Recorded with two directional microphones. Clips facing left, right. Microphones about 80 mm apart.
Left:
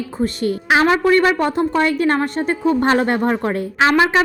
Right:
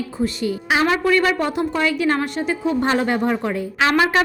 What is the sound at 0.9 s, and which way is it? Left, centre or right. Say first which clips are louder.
A woman's voice: left 3 dB; left.